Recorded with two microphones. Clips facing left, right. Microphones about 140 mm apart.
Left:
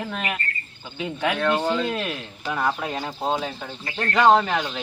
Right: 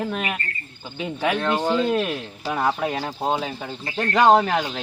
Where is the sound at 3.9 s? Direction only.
40° right (ahead or behind).